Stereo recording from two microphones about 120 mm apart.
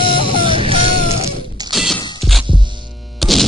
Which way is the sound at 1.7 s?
Centre (ahead or behind).